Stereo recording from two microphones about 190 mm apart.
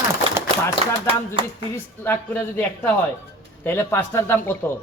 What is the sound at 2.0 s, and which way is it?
A woman's voice, 10° left (ahead or behind).